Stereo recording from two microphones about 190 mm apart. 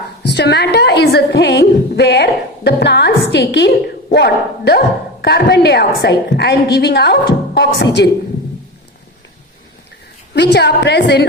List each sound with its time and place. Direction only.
0.2 s a woman's voice: 60° left (ahead or behind)
10.3 s a woman's voice: 60° left (ahead or behind)